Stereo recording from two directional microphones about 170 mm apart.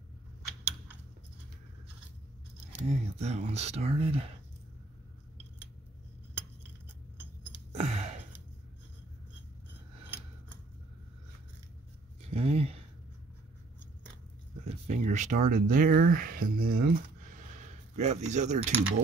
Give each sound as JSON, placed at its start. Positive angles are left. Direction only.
{"t": 2.9, "sound": "speech", "side_deg": -40}
{"t": 7.7, "sound": "gasp", "side_deg": -40}
{"t": 12.3, "sound": "a sound", "side_deg": -35}
{"t": 14.6, "sound": "speech", "side_deg": -40}
{"t": 17.6, "sound": "speech", "side_deg": -45}